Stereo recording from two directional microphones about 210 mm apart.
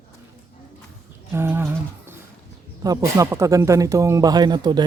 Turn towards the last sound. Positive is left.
turn(degrees=-20)  # may be behind; listen again after turning